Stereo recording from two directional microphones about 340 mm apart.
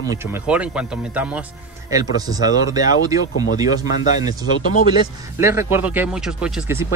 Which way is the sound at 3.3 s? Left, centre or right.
Left.